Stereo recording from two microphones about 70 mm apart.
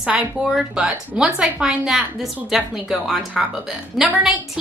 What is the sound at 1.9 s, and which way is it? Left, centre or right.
Speech, centre.